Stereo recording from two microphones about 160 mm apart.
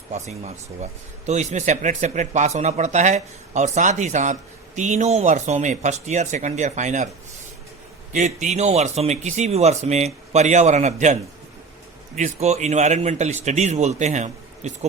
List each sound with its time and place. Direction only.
0.1 s a man's voice: 45° right (ahead or behind)
8.1 s a man's voice: 50° right (ahead or behind)